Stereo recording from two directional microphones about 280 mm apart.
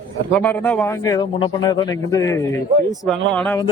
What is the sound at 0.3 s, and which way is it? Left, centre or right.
Speech, centre.